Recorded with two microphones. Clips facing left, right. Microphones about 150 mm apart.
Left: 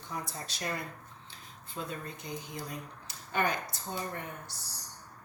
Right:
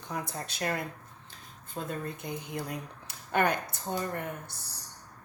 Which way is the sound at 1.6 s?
45° right (ahead or behind).